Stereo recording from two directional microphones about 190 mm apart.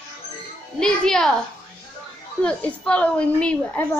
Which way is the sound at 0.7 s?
5° left (ahead or behind).